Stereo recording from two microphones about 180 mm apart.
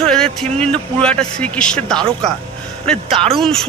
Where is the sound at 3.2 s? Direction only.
5° left (ahead or behind).